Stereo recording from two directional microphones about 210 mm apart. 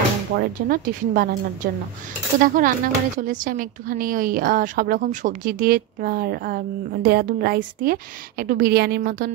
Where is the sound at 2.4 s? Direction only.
40° right (ahead or behind).